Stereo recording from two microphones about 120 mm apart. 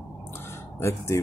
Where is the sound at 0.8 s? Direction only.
25° left (ahead or behind).